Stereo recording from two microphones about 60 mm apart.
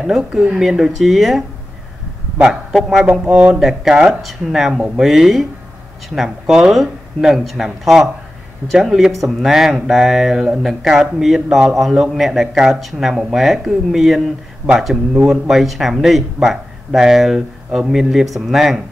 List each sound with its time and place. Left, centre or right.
0.0 s speech: centre
2.4 s a man's voice: centre
3.1 s speech: right
3.5 s a man's voice: centre